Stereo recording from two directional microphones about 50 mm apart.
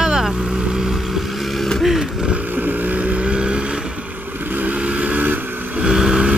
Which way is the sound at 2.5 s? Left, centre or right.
Right.